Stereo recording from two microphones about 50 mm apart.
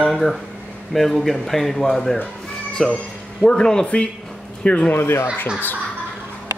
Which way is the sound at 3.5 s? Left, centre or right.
Centre.